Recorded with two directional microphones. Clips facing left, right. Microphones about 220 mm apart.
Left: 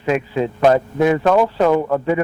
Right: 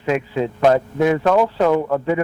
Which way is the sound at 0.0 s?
15° left (ahead or behind).